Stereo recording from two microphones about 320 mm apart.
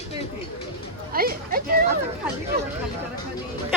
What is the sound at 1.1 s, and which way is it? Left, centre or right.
Speech, right.